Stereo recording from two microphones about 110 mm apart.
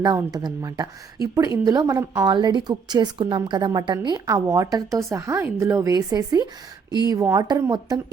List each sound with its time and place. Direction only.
0.3 s a woman's voice: 35° right (ahead or behind)
2.2 s a woman's voice: 40° right (ahead or behind)